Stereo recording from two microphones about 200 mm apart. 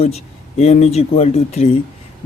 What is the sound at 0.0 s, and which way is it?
Speech, 30° left (ahead or behind).